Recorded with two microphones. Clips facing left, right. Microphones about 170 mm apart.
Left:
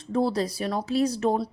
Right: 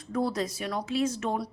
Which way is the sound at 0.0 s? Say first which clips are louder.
Left 4 dB; 30° left (ahead or behind).